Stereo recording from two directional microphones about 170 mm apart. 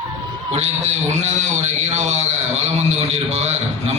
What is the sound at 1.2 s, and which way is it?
A man's voice, 40° right (ahead or behind).